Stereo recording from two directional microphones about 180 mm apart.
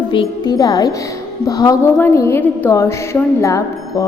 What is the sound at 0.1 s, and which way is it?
A woman's voice, 25° left (ahead or behind).